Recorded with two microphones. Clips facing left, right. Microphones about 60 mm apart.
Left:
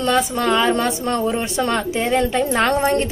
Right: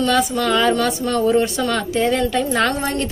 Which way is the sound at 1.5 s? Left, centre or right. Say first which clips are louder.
Even; left.